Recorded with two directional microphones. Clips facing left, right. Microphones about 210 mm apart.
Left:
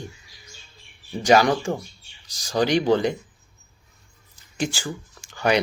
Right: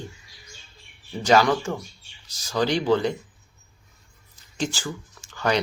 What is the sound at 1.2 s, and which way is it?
Speech, 15° left (ahead or behind).